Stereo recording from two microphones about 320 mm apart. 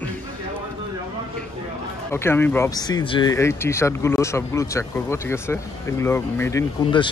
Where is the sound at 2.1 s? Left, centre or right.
Centre.